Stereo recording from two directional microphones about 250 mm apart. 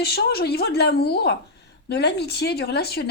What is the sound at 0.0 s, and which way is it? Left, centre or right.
Speech, left.